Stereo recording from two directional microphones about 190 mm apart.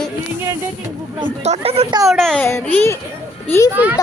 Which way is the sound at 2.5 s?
15° left (ahead or behind).